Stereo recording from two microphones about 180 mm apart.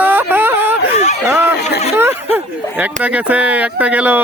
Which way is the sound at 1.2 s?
15° right (ahead or behind).